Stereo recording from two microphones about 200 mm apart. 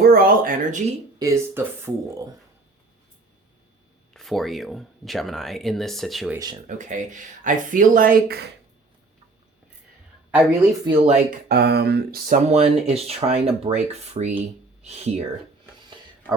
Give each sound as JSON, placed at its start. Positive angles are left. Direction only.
{"t": 0.0, "sound": "speech", "side_deg": -45}
{"t": 1.2, "sound": "speech", "side_deg": -15}
{"t": 4.1, "sound": "speech", "side_deg": 0}
{"t": 6.7, "sound": "speech", "side_deg": -40}
{"t": 10.8, "sound": "speech", "side_deg": -25}
{"t": 11.4, "sound": "speech", "side_deg": -55}
{"t": 12.5, "sound": "speech", "side_deg": -30}